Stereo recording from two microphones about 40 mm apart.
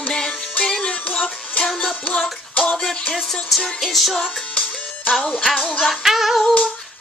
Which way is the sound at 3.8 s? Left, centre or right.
Centre.